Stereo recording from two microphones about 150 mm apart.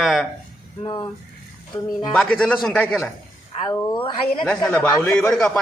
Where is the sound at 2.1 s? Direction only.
5° left (ahead or behind).